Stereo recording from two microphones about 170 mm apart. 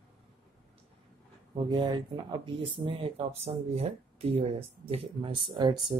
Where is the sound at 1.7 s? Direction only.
25° right (ahead or behind).